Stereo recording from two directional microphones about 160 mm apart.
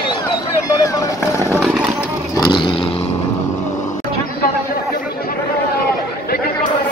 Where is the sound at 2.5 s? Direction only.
30° left (ahead or behind).